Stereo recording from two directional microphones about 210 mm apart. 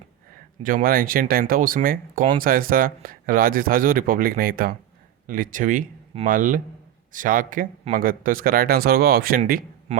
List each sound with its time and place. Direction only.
0.6 s speech: 40° right (ahead or behind)